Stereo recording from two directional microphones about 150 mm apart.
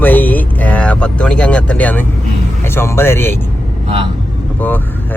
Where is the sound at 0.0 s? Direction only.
10° left (ahead or behind).